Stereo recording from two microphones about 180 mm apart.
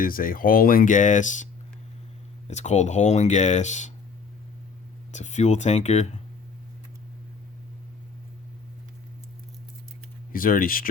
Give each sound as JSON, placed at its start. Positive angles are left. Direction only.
{"t": 0.0, "sound": "speech", "side_deg": 50}
{"t": 2.5, "sound": "speech", "side_deg": 40}
{"t": 5.1, "sound": "speech", "side_deg": 40}
{"t": 10.3, "sound": "speech", "side_deg": 50}